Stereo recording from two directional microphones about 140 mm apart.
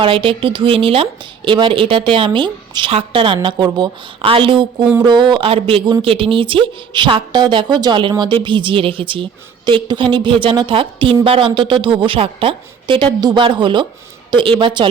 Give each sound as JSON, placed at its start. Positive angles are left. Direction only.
{"t": 0.0, "sound": "a woman's voice", "side_deg": -40}